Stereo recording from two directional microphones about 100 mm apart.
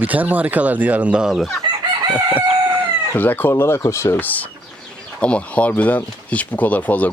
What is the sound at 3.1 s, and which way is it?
Speech, 20° left (ahead or behind).